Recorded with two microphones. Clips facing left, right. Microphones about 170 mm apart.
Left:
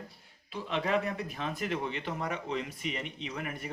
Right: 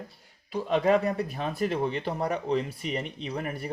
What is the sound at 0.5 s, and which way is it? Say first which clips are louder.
Speech: right 7 dB; 40° right (ahead or behind).